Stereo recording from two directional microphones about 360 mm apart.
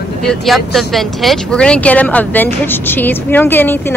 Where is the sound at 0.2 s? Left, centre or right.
Centre.